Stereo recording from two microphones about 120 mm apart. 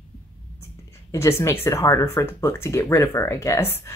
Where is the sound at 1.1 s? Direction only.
25° left (ahead or behind).